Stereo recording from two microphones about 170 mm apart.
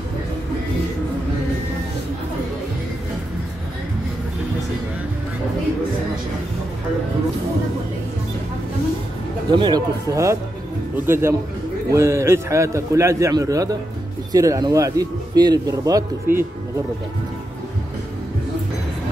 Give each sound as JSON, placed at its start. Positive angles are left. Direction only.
{"t": 9.5, "sound": "a man's voice", "side_deg": -25}